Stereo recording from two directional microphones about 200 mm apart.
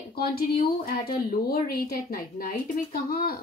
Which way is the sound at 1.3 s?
45° left (ahead or behind).